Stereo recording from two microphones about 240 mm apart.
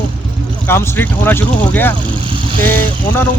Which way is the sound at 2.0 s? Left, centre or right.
Right.